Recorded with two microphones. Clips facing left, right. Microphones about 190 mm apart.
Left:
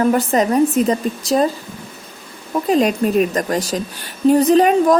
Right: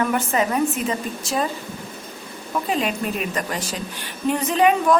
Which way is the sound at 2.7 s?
40° left (ahead or behind).